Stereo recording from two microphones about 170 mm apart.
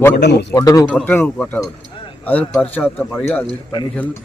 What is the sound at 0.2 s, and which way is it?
Speech, 75° left (ahead or behind).